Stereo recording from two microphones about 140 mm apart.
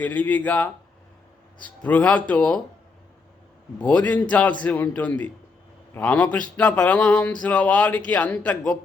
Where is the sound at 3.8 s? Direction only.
10° left (ahead or behind).